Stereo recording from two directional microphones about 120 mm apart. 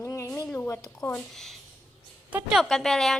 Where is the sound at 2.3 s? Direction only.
10° right (ahead or behind).